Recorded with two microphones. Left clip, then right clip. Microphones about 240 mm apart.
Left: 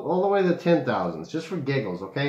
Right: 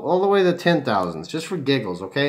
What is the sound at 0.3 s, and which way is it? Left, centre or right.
Speech, right.